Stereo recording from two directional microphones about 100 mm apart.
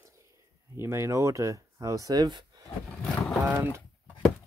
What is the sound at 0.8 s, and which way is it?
Speech, 25° right (ahead or behind).